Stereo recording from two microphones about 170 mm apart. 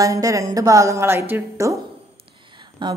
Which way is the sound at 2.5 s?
25° right (ahead or behind).